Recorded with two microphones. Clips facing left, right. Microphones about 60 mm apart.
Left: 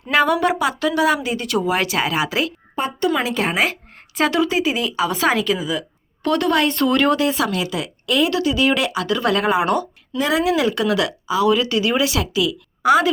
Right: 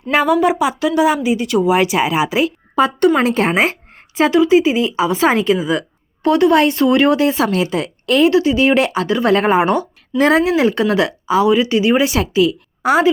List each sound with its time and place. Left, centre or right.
0.3 s speech: centre
1.6 s speech: centre
3.2 s speech: right
6.2 s speech: centre
7.2 s speech: right
8.3 s speech: right
10.2 s speech: right
10.4 s speech: right
11.4 s speech: right